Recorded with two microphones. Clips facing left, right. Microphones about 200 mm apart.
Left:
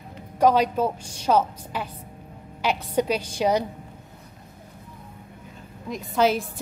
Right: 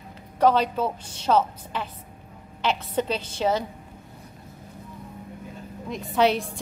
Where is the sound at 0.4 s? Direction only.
10° left (ahead or behind).